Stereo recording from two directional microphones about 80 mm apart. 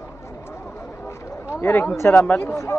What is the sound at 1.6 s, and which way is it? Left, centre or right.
Speech, left.